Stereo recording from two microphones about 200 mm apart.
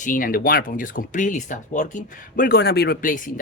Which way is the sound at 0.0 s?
45° left (ahead or behind).